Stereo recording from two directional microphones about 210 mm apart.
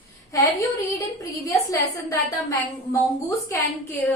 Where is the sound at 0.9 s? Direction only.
15° left (ahead or behind).